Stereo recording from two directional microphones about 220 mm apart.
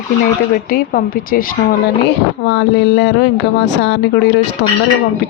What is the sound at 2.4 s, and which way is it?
Speech, 55° left (ahead or behind).